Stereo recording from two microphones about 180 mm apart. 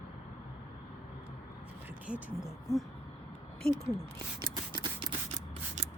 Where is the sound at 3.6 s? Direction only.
35° right (ahead or behind).